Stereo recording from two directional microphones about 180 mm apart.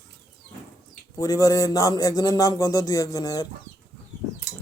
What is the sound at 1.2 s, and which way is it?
Speech, 20° left (ahead or behind).